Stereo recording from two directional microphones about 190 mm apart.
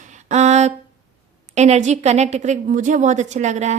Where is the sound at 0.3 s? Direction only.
35° right (ahead or behind).